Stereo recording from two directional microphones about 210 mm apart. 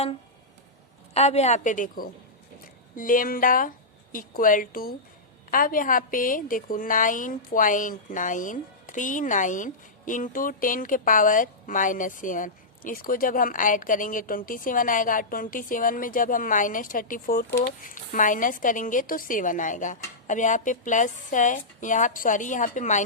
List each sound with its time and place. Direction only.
1.1 s a woman's voice: 30° left (ahead or behind)